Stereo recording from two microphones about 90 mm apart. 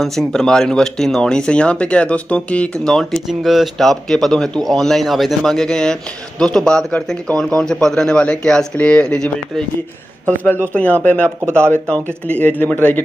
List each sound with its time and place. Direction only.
0.0 s speech: 5° left (ahead or behind); by 13.0 s 20° left (ahead or behind)